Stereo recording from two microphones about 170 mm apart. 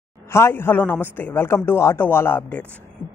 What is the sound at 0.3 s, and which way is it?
A man's voice, 15° left (ahead or behind).